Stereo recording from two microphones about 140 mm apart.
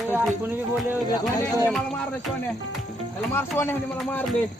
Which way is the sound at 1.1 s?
25° left (ahead or behind).